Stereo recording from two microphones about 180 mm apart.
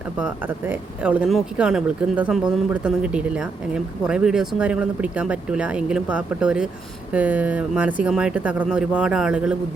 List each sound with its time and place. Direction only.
0.2 s speech: 10° right (ahead or behind)